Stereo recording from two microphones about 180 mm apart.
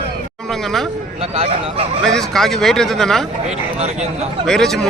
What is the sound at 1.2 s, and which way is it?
Speech, 35° right (ahead or behind).